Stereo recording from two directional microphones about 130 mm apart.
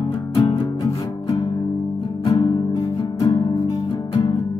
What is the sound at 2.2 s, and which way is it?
Music, 40° left (ahead or behind).